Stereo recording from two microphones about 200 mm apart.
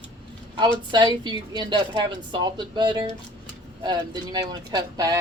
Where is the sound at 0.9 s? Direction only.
20° right (ahead or behind).